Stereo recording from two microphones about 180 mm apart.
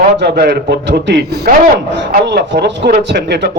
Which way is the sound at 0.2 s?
60° right (ahead or behind).